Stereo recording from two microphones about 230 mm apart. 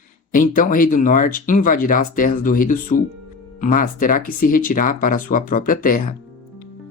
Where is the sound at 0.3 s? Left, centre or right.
Left.